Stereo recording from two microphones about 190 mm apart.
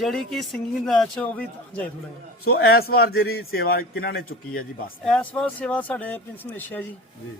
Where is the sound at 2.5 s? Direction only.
55° left (ahead or behind).